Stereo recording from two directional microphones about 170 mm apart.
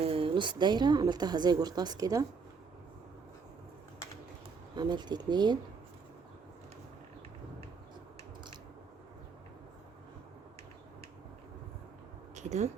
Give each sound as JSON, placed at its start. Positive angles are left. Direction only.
{"t": 0.0, "sound": "a woman's voice", "side_deg": -30}
{"t": 4.7, "sound": "a woman's voice", "side_deg": -25}
{"t": 12.3, "sound": "a sound", "side_deg": -40}